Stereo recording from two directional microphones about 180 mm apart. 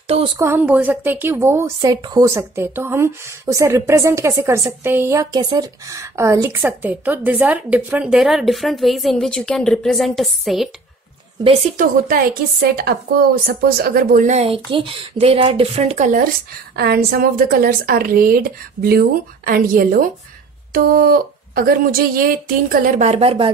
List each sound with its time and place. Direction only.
0.4 s a woman's voice: 10° right (ahead or behind)
11.4 s speech: 35° right (ahead or behind)
12.9 s speech: 55° right (ahead or behind)
16.7 s a woman's voice: 60° right (ahead or behind)
23.0 s speech: 35° right (ahead or behind)